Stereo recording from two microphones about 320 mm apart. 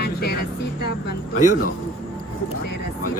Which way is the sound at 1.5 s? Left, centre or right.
Left.